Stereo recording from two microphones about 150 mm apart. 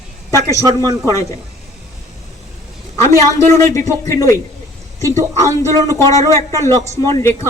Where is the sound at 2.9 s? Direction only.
20° left (ahead or behind).